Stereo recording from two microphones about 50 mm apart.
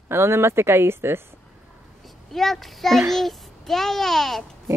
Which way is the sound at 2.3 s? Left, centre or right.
Centre.